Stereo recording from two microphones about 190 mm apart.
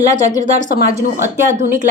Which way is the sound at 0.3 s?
40° right (ahead or behind).